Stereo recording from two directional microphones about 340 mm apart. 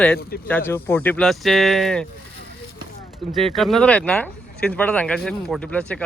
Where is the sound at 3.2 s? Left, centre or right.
Centre.